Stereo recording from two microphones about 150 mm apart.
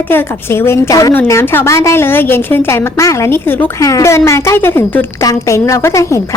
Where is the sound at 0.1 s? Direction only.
15° left (ahead or behind).